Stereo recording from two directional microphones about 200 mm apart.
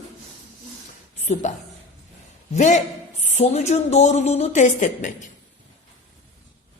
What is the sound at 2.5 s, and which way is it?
Speech, 40° left (ahead or behind).